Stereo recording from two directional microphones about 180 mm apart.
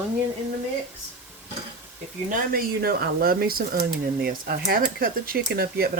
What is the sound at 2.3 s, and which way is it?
Speech, 55° right (ahead or behind).